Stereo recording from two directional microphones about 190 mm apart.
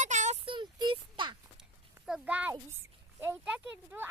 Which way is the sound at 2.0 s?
5° right (ahead or behind).